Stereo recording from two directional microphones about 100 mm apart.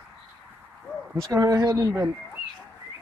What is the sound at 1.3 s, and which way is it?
Speech, 35° right (ahead or behind).